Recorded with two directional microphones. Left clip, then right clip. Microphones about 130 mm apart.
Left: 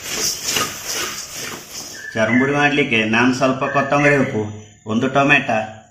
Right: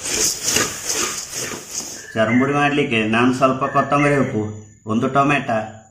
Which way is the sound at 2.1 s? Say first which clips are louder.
Left 1 dB; 10° right (ahead or behind).